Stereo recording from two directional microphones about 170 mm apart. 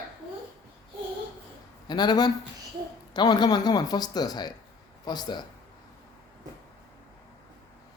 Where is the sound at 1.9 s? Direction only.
25° left (ahead or behind).